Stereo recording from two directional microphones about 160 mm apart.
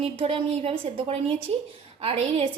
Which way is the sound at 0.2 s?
35° right (ahead or behind).